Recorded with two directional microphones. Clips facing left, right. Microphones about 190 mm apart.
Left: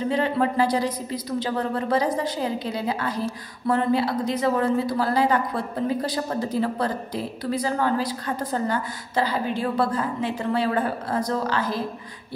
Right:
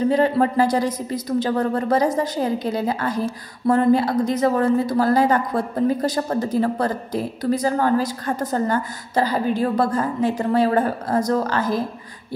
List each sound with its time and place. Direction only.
0.1 s a woman's voice: 40° right (ahead or behind)